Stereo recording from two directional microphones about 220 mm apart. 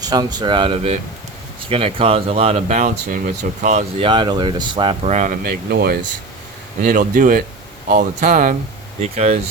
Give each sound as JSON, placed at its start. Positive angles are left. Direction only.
{"t": 0.0, "sound": "speech", "side_deg": -20}